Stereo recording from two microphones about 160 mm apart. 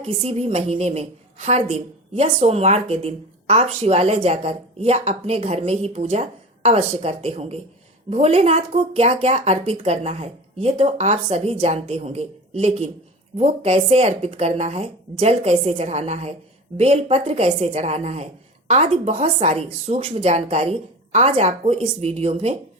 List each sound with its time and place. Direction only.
0.2 s a woman's voice: 40° right (ahead or behind)